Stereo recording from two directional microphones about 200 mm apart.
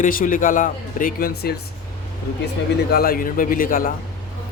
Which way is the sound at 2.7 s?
50° left (ahead or behind).